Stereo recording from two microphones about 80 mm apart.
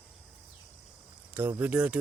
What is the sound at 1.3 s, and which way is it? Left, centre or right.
Speech, right.